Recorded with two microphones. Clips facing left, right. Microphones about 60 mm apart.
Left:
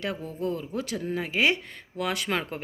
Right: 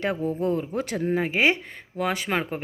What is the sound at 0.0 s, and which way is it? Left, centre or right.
A woman's voice, right.